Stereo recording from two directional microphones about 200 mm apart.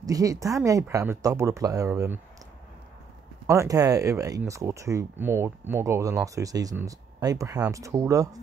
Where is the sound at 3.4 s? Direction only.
15° right (ahead or behind).